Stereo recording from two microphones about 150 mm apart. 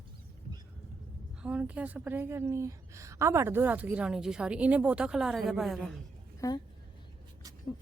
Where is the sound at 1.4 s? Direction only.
10° right (ahead or behind).